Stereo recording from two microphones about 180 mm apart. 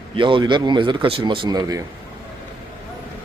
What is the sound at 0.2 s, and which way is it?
Speech, 25° right (ahead or behind).